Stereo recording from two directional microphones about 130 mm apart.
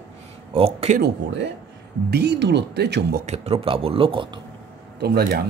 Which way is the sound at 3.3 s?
50° right (ahead or behind).